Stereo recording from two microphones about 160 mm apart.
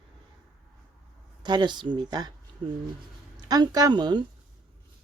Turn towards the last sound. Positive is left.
turn(degrees=-25)  # may be behind; listen again after turning